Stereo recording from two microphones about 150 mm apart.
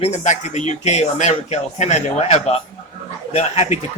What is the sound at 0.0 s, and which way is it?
Speech, 50° left (ahead or behind).